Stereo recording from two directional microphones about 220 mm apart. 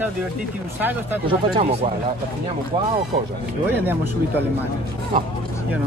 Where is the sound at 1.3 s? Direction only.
25° right (ahead or behind).